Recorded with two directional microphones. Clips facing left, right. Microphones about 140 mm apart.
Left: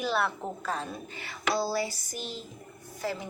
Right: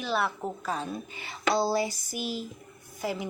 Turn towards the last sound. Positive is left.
turn(degrees=-15)  # may be behind; listen again after turning